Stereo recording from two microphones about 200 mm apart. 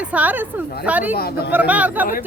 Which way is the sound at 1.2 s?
50° left (ahead or behind).